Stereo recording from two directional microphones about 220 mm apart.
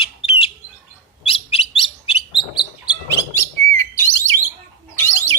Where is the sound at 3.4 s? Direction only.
10° left (ahead or behind).